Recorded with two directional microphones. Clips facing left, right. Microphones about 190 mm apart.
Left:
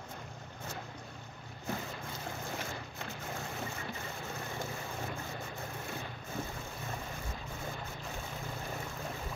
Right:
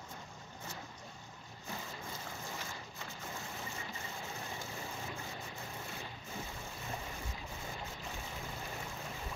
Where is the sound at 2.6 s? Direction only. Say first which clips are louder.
Left 5 dB; 60° left (ahead or behind).